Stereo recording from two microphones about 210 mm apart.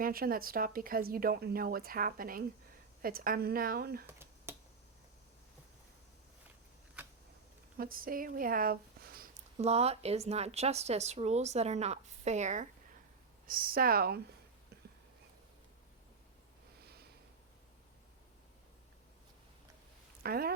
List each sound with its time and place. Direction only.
0.0 s a woman's voice: 45° right (ahead or behind)
4.0 s a sound: 10° right (ahead or behind)
7.8 s speech: 45° right (ahead or behind)
9.6 s a woman's voice: 30° right (ahead or behind); by 14.2 s 45° right (ahead or behind)
20.2 s speech: 45° right (ahead or behind)